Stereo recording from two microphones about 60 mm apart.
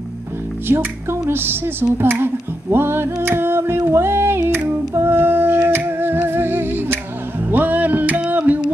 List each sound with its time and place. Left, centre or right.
0.7 s music: right